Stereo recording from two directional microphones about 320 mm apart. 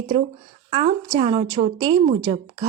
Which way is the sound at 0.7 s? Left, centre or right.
Centre.